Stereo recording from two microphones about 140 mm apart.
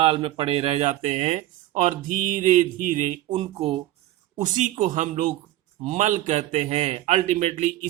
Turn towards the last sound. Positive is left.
turn(degrees=-60)  # may be behind; listen again after turning